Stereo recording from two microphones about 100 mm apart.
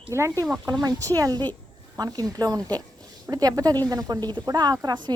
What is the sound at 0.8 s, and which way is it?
A woman's voice, 35° right (ahead or behind).